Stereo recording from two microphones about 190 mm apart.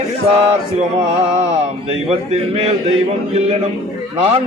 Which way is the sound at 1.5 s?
35° right (ahead or behind).